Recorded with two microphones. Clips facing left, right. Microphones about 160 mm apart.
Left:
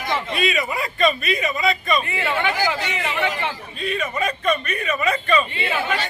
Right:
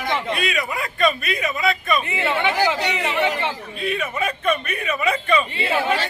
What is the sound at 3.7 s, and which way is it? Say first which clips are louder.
A man's voice: even; 10° right (ahead or behind).